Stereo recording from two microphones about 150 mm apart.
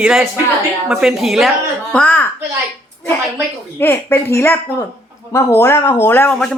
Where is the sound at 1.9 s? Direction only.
10° left (ahead or behind).